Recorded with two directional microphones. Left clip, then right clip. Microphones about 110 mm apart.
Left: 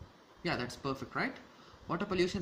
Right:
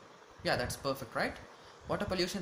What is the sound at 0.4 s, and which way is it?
Speech, 30° left (ahead or behind).